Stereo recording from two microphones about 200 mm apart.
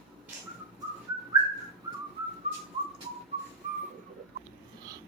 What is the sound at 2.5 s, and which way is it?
Whistling, 35° right (ahead or behind).